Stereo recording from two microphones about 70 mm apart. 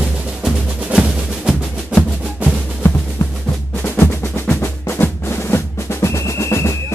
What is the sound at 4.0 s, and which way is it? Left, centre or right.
Music, left.